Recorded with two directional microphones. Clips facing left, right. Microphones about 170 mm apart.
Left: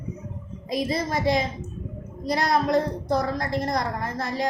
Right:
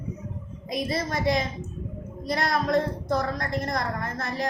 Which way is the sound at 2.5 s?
30° left (ahead or behind).